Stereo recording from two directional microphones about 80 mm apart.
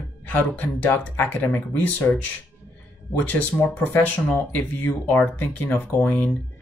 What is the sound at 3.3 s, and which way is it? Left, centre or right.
Speech, left.